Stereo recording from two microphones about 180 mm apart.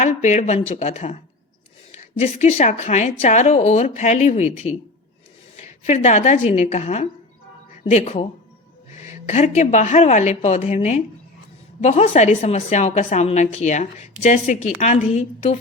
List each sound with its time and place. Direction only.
0.0 s a woman's voice: 40° left (ahead or behind)